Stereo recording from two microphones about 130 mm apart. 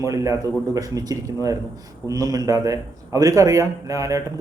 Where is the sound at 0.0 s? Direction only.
25° right (ahead or behind).